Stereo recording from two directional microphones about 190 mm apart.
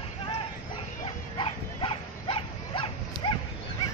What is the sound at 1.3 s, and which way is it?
Dog, 30° left (ahead or behind).